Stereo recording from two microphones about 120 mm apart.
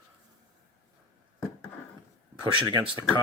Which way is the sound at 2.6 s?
35° right (ahead or behind).